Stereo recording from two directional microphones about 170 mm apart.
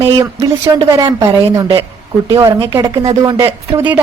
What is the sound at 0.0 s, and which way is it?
Speech, 20° right (ahead or behind).